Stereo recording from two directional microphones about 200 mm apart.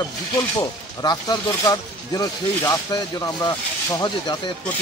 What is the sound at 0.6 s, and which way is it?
Speech, 20° left (ahead or behind).